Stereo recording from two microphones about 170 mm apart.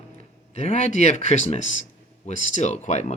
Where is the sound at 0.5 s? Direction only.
40° left (ahead or behind).